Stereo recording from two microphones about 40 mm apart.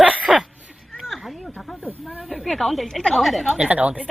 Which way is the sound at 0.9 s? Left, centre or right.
Centre.